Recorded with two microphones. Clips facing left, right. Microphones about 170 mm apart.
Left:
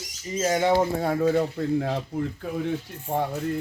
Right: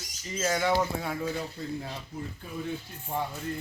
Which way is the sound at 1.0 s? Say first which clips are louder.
Left 10 dB; 45° left (ahead or behind).